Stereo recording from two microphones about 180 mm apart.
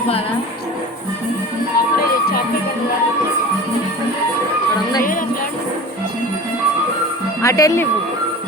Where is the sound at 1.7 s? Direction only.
55° left (ahead or behind).